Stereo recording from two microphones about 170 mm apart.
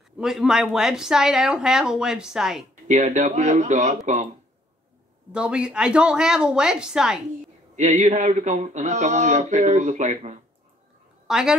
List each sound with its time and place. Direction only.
0.2 s speech: 5° right (ahead or behind)
2.9 s speech: 45° right (ahead or behind)
5.3 s speech: 5° right (ahead or behind)
7.7 s speech: 45° right (ahead or behind)
11.2 s a woman's voice: 5° right (ahead or behind)